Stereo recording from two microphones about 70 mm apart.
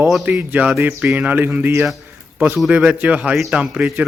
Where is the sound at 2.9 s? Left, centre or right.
Centre.